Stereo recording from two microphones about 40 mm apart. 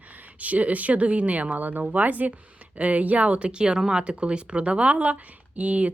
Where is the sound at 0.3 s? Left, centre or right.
Right.